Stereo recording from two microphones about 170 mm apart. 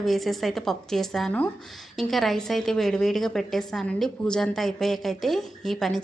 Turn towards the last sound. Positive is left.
turn(degrees=0)  # may be behind; listen again after turning